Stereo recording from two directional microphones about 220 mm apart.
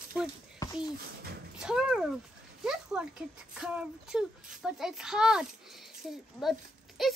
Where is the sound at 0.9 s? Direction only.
45° right (ahead or behind).